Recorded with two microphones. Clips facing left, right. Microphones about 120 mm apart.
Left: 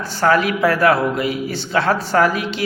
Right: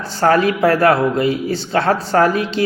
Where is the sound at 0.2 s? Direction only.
35° right (ahead or behind).